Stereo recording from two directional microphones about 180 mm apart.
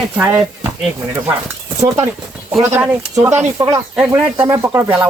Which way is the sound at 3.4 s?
20° right (ahead or behind).